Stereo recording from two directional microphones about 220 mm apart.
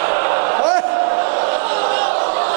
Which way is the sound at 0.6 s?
20° right (ahead or behind).